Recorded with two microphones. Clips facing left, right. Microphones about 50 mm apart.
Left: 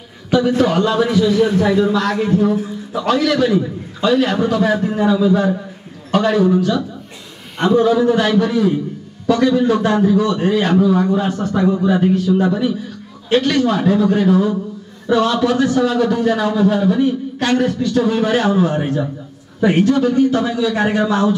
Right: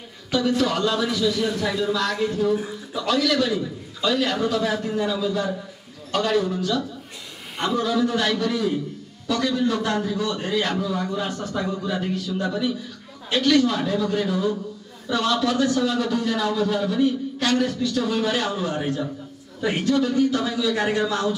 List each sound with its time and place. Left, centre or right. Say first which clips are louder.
0.3 s a man's voice: left 7 dB; left